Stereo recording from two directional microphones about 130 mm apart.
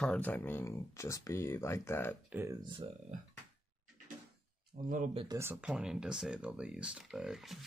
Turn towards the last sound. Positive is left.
turn(degrees=0)  # may be behind; listen again after turning